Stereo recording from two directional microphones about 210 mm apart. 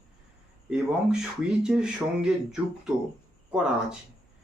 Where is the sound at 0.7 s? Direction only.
5° right (ahead or behind).